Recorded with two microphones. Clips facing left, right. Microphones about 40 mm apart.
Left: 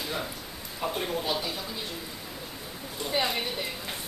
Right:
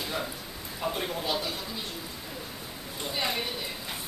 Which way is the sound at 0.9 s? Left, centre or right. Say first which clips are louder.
Left 2 dB; centre.